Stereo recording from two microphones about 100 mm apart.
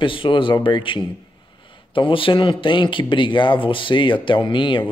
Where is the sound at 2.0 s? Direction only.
60° left (ahead or behind).